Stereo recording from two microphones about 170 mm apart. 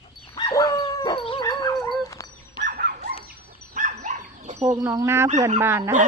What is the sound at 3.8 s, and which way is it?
Dog, 45° right (ahead or behind).